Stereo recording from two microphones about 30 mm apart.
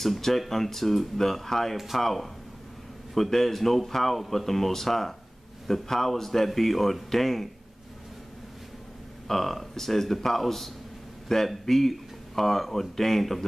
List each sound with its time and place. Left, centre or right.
0.0 s speech: centre
9.3 s speech: centre